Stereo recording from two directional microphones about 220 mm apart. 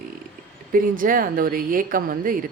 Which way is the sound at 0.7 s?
40° right (ahead or behind).